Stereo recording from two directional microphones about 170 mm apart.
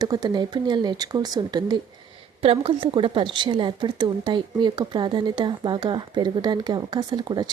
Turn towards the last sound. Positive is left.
turn(degrees=-25)  # may be behind; listen again after turning